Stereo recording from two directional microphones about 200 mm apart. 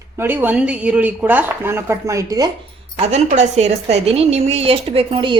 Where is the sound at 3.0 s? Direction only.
35° right (ahead or behind).